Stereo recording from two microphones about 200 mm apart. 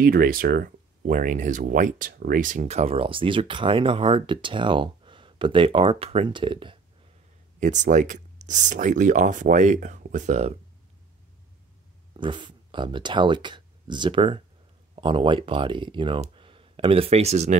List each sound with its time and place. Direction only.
0.0 s speech: 45° right (ahead or behind); by 6.8 s 25° right (ahead or behind)
7.6 s speech: 40° right (ahead or behind)
12.2 s speech: 25° right (ahead or behind)